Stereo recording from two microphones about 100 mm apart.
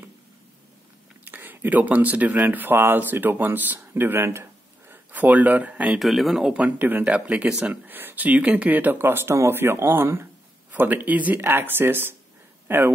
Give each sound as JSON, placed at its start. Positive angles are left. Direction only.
{"t": 1.2, "sound": "speech", "side_deg": -20}
{"t": 5.9, "sound": "speech", "side_deg": 0}